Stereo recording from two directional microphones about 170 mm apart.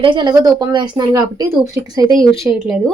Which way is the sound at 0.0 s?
30° right (ahead or behind).